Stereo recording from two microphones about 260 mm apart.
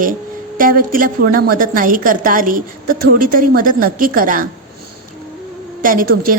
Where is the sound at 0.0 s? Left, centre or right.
Right.